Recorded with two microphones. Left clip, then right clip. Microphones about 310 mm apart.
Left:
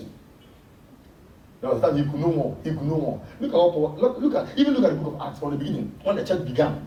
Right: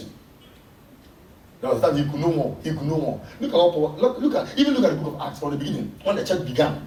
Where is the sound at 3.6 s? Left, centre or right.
Left.